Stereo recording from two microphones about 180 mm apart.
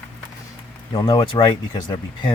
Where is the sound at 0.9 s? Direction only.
25° left (ahead or behind).